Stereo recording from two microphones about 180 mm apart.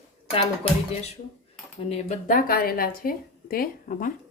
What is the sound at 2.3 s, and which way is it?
A woman's voice, 55° left (ahead or behind).